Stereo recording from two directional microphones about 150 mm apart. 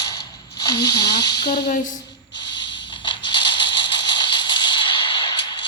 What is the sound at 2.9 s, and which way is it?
Music, 30° left (ahead or behind).